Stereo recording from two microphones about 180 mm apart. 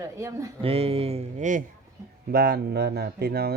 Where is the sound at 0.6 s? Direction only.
35° right (ahead or behind).